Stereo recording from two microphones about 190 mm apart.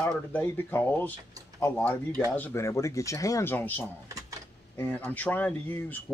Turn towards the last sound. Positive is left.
turn(degrees=10)  # may be behind; listen again after turning